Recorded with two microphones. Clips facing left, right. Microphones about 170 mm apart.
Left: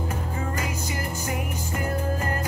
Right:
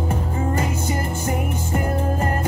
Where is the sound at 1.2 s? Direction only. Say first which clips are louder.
Right 6 dB; 25° right (ahead or behind).